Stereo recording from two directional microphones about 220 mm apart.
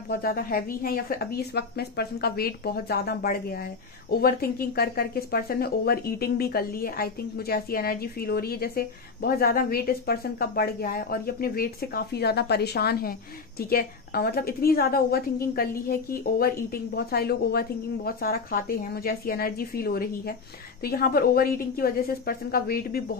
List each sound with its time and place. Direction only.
0.1 s a woman's voice: 40° left (ahead or behind)